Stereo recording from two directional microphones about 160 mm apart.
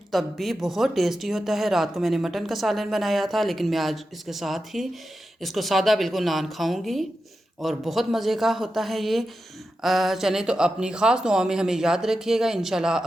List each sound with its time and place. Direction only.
0.1 s a woman's voice: centre (ahead or behind)